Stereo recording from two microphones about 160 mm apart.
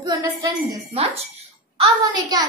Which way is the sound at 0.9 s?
40° right (ahead or behind).